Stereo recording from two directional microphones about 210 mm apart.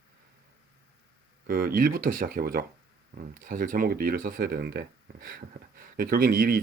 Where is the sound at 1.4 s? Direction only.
40° right (ahead or behind).